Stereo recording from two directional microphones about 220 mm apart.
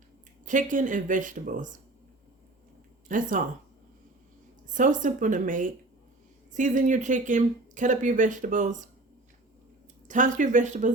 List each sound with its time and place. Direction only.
0.4 s speech: 35° right (ahead or behind)
3.1 s speech: 35° right (ahead or behind)
4.8 s speech: 35° right (ahead or behind)
10.1 s speech: 35° right (ahead or behind)